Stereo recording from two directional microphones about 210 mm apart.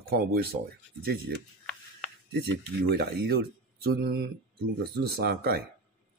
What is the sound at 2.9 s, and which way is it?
Speech, 50° right (ahead or behind).